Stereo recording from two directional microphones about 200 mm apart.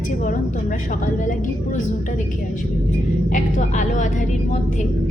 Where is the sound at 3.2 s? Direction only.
40° left (ahead or behind).